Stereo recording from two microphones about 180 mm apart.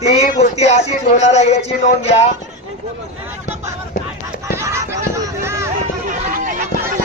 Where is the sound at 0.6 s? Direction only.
35° left (ahead or behind).